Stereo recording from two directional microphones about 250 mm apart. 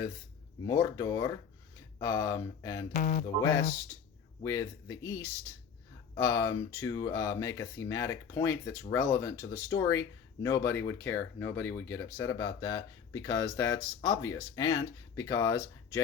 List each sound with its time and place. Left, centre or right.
0.7 s speech: centre
2.9 s a sound: left
3.4 s speech: centre